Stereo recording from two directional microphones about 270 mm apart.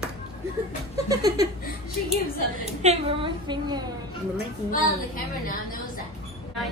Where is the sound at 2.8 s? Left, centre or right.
Right.